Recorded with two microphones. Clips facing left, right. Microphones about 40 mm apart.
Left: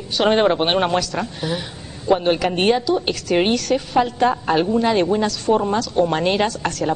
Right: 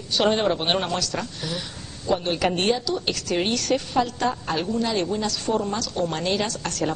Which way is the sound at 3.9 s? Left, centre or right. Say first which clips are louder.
Left 6 dB; left.